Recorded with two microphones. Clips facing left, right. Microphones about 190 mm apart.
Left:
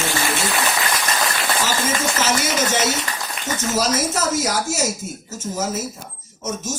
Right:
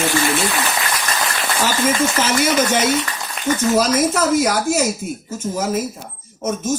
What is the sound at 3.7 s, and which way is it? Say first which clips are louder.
Speech: right 2 dB; 55° right (ahead or behind).